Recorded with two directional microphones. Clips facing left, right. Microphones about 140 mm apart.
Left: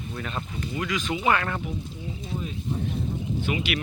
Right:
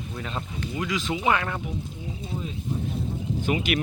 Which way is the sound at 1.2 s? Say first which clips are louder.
Left 1 dB; 10° right (ahead or behind).